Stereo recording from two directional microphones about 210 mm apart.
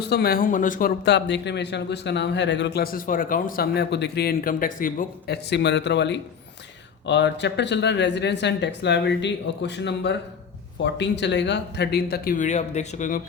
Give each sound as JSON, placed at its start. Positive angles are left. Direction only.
{"t": 0.0, "sound": "speech", "side_deg": 50}